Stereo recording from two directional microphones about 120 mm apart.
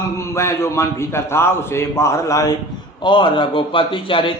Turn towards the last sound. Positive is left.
turn(degrees=45)  # may be behind; listen again after turning